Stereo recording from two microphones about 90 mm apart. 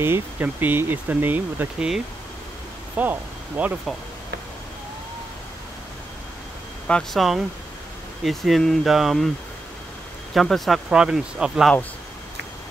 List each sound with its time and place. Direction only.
0.0 s speech: 25° right (ahead or behind)
1.8 s speech: 10° right (ahead or behind)
3.0 s speech: 20° right (ahead or behind)
7.2 s speech: 5° right (ahead or behind)
10.3 s speech: centre (ahead or behind)